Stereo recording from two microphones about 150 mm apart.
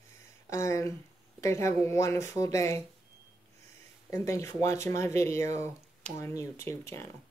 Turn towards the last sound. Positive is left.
turn(degrees=20)  # may be behind; listen again after turning